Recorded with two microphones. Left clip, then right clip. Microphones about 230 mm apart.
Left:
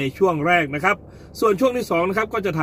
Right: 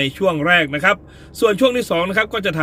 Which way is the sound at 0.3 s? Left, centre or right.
Centre.